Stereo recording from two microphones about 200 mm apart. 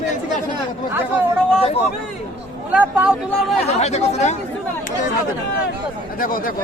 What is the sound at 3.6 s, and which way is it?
Speech, 35° left (ahead or behind).